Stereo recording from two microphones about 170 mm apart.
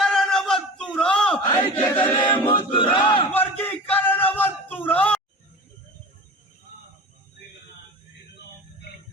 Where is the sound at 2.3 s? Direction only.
30° left (ahead or behind).